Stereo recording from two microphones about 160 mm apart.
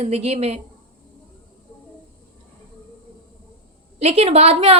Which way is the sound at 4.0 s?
40° right (ahead or behind).